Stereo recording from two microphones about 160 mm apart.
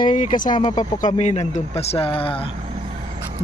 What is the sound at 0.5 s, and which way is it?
Speech, 30° left (ahead or behind).